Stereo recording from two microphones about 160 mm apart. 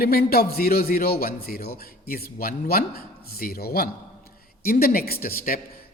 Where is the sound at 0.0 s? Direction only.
75° left (ahead or behind).